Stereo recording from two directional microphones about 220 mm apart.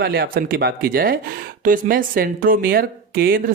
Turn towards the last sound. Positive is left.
turn(degrees=-40)  # may be behind; listen again after turning